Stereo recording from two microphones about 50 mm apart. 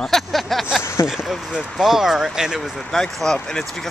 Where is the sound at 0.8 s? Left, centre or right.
Left.